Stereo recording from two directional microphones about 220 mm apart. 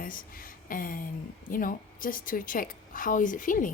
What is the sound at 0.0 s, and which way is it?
A woman's voice, 40° left (ahead or behind).